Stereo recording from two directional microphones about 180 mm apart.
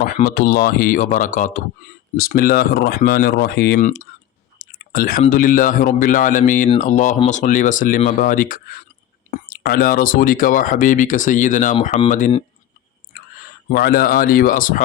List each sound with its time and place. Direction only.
0.0 s speech: 50° left (ahead or behind)
2.1 s speech: 55° left (ahead or behind)
3.8 s speech: 45° left (ahead or behind)
13.7 s speech: 55° left (ahead or behind)